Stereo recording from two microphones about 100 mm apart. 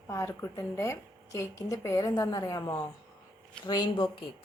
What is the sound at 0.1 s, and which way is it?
A woman's voice, 30° left (ahead or behind).